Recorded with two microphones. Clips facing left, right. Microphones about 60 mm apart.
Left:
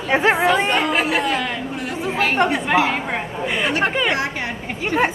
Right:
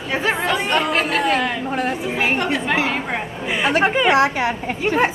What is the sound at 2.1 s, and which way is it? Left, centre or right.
Speech, centre.